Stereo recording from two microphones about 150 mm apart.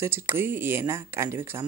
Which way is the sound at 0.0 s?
15° right (ahead or behind).